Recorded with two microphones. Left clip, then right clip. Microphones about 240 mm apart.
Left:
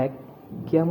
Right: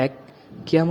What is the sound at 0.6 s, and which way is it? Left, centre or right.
Speech, right.